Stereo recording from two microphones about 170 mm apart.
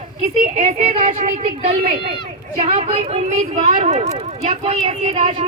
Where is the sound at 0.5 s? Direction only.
45° right (ahead or behind).